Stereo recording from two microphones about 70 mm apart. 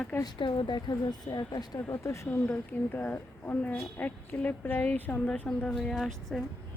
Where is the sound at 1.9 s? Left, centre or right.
Left.